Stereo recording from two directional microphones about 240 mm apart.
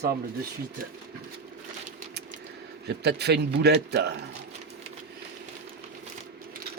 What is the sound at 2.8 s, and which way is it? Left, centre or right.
Speech, right.